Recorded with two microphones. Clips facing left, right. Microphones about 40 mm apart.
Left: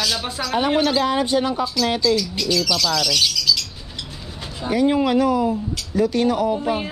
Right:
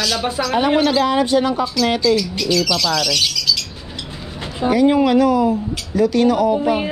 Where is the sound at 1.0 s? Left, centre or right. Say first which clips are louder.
Right 4 dB; right.